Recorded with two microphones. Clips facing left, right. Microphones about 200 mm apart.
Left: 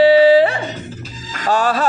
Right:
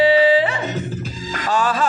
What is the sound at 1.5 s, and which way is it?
Music, 35° left (ahead or behind).